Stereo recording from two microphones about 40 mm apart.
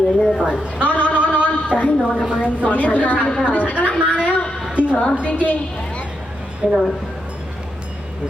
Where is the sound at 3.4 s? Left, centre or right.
Left.